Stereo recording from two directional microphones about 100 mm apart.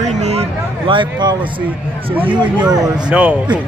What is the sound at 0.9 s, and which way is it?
Speech, 50° right (ahead or behind).